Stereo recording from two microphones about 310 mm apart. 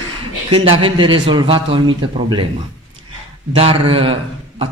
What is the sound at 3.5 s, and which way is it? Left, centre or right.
A man's voice, centre.